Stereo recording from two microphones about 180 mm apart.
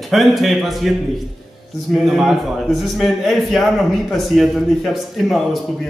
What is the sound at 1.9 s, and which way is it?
A man's voice, centre (ahead or behind).